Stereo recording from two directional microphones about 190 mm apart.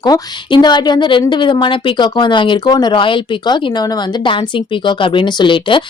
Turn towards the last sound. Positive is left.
turn(degrees=25)  # may be behind; listen again after turning